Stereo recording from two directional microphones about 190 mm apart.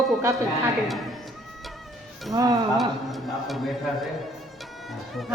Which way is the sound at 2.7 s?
Centre (ahead or behind).